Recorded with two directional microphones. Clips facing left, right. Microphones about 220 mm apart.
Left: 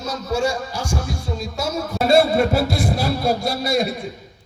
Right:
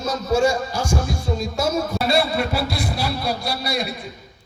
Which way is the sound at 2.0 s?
50° left (ahead or behind).